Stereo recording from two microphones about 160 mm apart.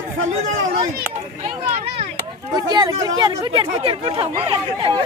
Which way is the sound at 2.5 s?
25° right (ahead or behind).